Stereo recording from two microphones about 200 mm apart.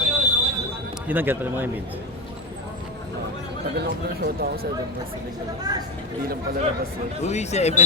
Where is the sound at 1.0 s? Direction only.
10° right (ahead or behind).